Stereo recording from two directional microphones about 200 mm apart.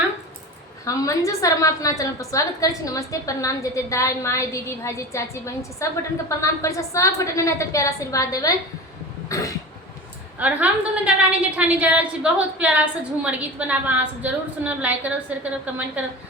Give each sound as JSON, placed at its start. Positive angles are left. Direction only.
{"t": 0.9, "sound": "a woman's voice", "side_deg": 15}
{"t": 10.4, "sound": "a woman's voice", "side_deg": -5}